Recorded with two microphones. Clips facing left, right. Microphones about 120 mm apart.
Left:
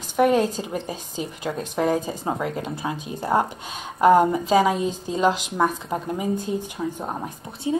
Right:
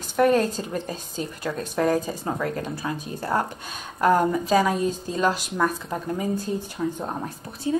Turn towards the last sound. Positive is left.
turn(degrees=20)  # may be behind; listen again after turning